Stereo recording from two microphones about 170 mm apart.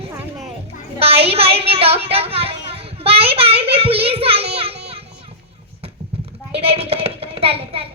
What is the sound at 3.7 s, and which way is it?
Child singing, 35° right (ahead or behind).